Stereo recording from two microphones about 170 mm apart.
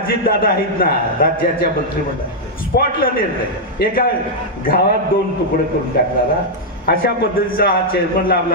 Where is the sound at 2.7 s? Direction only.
65° left (ahead or behind).